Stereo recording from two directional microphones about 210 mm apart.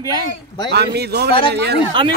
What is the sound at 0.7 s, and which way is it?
Speech, 50° right (ahead or behind).